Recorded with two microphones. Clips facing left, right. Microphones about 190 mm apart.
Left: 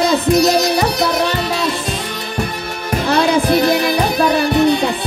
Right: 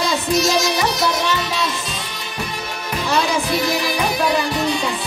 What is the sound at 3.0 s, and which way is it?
Music, 60° left (ahead or behind).